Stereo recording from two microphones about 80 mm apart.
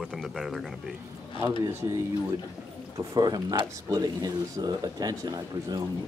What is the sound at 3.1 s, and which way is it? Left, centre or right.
Speech, right.